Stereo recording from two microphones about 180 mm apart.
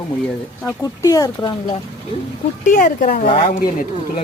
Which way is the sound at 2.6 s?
45° left (ahead or behind).